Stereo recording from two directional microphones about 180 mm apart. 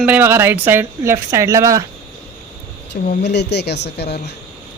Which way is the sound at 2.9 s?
70° left (ahead or behind).